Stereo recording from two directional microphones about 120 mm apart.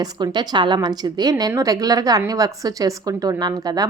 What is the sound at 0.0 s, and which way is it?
A woman's voice, 35° right (ahead or behind).